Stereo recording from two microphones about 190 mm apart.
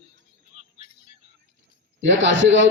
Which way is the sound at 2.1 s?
75° right (ahead or behind).